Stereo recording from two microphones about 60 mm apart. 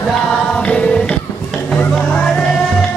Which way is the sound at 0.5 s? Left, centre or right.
Left.